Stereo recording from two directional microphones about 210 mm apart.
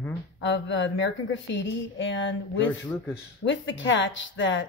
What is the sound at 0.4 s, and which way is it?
A woman's voice, 60° left (ahead or behind).